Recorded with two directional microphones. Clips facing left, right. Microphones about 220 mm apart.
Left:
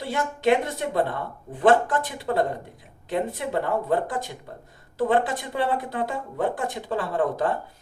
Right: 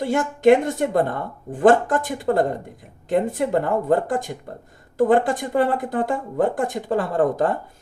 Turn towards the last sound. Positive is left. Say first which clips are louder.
# right 4 dB
turn(degrees=-45)  # may be behind; listen again after turning